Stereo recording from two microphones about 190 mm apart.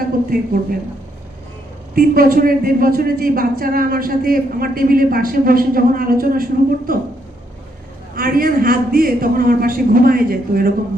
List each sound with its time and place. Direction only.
0.3 s speech: 50° right (ahead or behind)
2.0 s speech: 50° right (ahead or behind)
8.1 s speech: 50° right (ahead or behind)